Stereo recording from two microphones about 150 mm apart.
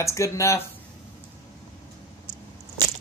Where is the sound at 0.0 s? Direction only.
20° left (ahead or behind).